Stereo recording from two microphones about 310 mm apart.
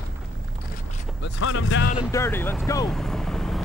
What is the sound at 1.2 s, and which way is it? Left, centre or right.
Speech, left.